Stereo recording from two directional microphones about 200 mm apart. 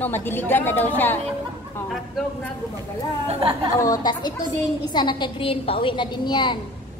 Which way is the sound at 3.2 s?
30° right (ahead or behind).